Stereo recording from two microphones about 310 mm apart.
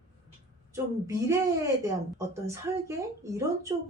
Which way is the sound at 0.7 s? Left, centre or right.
Centre.